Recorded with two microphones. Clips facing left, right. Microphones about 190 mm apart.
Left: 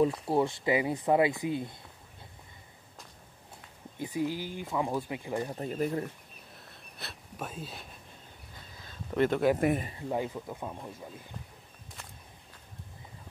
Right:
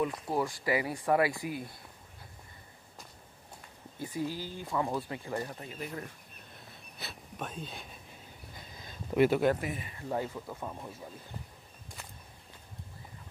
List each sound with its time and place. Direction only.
0.3 s speech: 25° left (ahead or behind)
4.0 s speech: 15° left (ahead or behind)
5.6 s speech: 40° left (ahead or behind)
6.5 s wheeze: centre (ahead or behind)
8.7 s a sound: 10° right (ahead or behind)
9.6 s speech: 50° left (ahead or behind)
10.0 s speech: 15° left (ahead or behind)